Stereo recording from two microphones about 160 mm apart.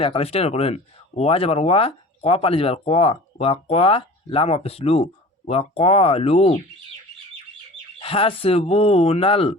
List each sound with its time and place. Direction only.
0.0 s speech: 35° left (ahead or behind)
7.9 s speech: 35° left (ahead or behind)